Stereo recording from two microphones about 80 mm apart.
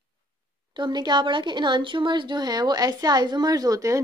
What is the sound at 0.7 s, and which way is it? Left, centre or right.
Speech, right.